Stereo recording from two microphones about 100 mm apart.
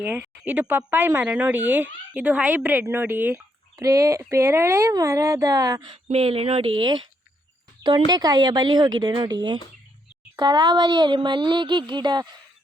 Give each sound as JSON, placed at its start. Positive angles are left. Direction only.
{"t": 0.0, "sound": "speech", "side_deg": -20}
{"t": 3.8, "sound": "speech", "side_deg": -30}
{"t": 5.9, "sound": "speech", "side_deg": -70}